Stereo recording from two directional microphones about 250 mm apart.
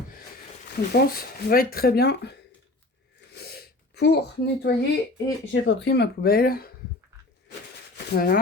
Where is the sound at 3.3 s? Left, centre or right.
Left.